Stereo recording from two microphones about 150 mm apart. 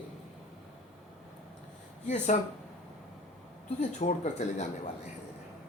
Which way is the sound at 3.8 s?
50° left (ahead or behind).